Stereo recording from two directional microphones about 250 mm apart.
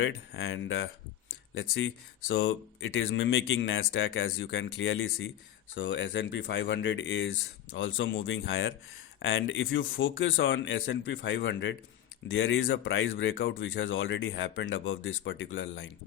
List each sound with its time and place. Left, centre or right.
0.0 s speech: left